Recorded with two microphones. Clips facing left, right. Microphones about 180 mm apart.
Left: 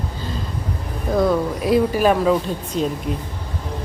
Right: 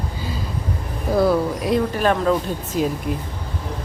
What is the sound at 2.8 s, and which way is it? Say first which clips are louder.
Speech: right 1 dB; 5° right (ahead or behind).